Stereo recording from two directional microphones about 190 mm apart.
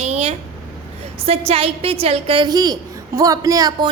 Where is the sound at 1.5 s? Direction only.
30° right (ahead or behind).